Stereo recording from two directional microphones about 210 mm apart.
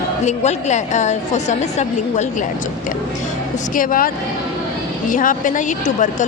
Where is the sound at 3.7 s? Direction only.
40° left (ahead or behind).